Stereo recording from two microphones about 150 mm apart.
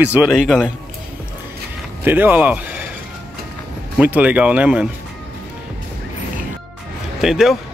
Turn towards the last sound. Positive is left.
turn(degrees=0)  # may be behind; listen again after turning